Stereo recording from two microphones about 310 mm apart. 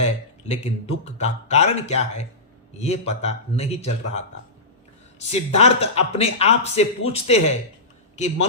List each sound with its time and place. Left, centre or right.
0.0 s a man's voice: left
5.3 s a man's voice: centre